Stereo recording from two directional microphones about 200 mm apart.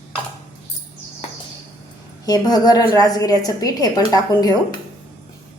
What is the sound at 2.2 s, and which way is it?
A woman's voice, 20° left (ahead or behind).